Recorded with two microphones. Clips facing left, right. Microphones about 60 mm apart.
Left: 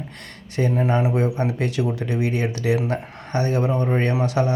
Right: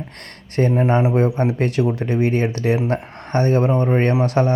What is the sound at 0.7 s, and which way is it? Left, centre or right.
A man's voice, right.